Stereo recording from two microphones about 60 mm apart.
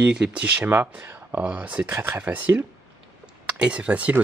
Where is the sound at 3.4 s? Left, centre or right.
Centre.